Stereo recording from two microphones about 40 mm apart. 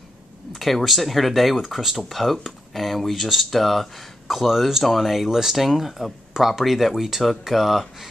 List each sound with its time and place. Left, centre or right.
0.5 s speech: centre